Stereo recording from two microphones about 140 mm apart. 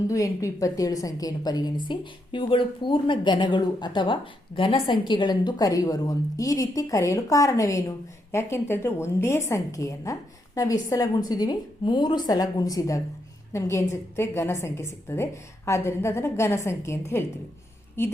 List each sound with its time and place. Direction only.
0.1 s a woman's voice: 25° left (ahead or behind)